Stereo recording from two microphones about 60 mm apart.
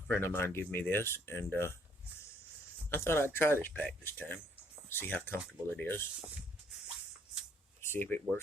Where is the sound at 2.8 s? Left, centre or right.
Left.